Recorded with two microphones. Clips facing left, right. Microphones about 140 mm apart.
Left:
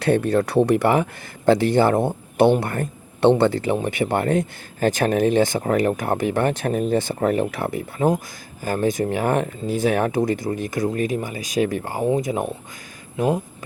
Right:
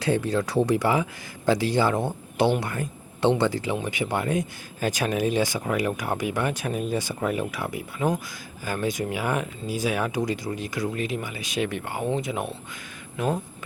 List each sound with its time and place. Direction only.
0.0 s speech: 60° left (ahead or behind); by 12.4 s 35° left (ahead or behind)
13.1 s speech: 15° left (ahead or behind)